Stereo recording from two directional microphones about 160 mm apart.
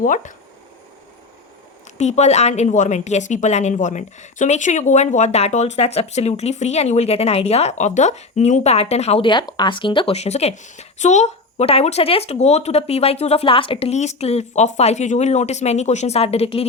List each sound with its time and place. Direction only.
0.0 s a woman's voice: 50° left (ahead or behind)
2.0 s a woman's voice: 45° left (ahead or behind)